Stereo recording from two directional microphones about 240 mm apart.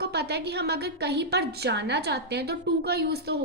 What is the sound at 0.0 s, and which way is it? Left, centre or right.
A woman's voice, right.